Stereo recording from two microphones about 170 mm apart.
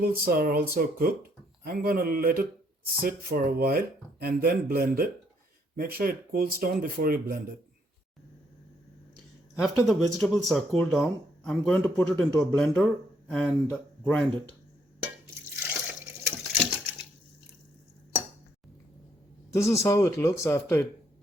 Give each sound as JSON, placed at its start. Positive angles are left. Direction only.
{"t": 0.0, "sound": "speech", "side_deg": -60}
{"t": 9.6, "sound": "speech", "side_deg": 0}
{"t": 15.6, "sound": "water", "side_deg": -10}
{"t": 19.5, "sound": "speech", "side_deg": 15}